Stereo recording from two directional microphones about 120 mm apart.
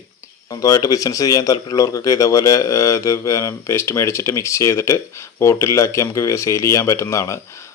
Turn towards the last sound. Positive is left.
turn(degrees=25)  # may be behind; listen again after turning